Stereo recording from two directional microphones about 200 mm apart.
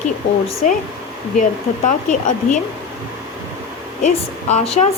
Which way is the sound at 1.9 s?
40° left (ahead or behind).